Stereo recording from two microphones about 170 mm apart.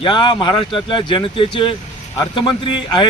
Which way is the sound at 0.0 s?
30° left (ahead or behind).